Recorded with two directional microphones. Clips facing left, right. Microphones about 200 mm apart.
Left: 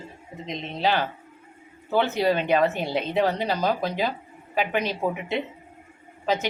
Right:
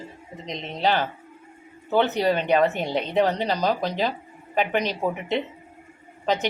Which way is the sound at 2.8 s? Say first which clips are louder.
Right 1 dB; 5° left (ahead or behind).